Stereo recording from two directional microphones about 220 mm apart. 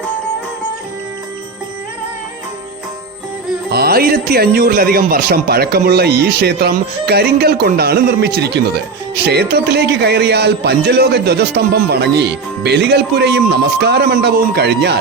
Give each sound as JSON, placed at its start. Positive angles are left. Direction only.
{"t": 3.7, "sound": "speech", "side_deg": -45}